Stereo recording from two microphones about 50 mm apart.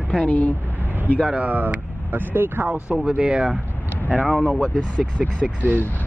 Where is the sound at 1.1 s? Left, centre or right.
Left.